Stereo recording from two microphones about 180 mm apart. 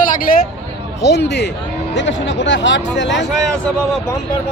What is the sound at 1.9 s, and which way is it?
Speech, 90° left.